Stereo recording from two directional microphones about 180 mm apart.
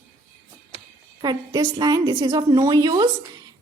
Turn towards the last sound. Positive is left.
turn(degrees=-20)  # may be behind; listen again after turning